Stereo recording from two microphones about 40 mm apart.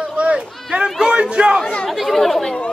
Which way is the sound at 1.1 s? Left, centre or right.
Right.